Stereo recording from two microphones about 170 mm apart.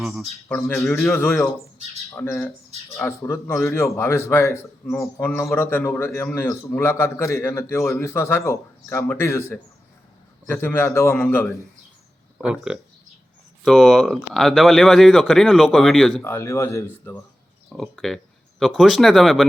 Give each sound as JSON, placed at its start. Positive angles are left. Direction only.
{"t": 0.0, "sound": "speech", "side_deg": 0}
{"t": 1.2, "sound": "a man's voice", "side_deg": 15}
{"t": 12.4, "sound": "speech", "side_deg": -5}
{"t": 16.2, "sound": "a man's voice", "side_deg": 15}
{"t": 17.7, "sound": "speech", "side_deg": 0}